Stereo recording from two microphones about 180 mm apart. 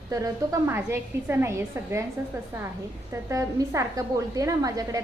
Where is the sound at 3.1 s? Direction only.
15° right (ahead or behind).